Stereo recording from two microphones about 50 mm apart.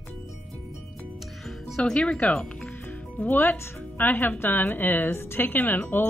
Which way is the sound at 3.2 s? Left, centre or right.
Left.